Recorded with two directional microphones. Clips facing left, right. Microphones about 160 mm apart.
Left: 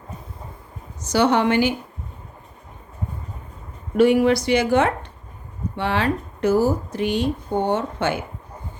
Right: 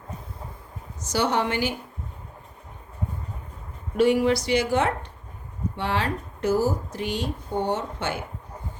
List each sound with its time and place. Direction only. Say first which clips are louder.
1.1 s a woman's voice: left 6 dB; 65° left (ahead or behind)
3.9 s speech: left 4 dB; 55° left (ahead or behind)